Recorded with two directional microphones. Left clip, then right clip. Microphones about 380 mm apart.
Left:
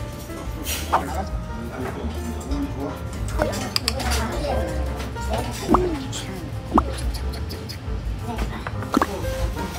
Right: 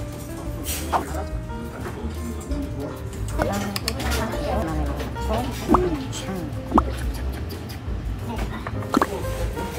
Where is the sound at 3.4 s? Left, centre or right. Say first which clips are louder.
Left 1 dB; centre.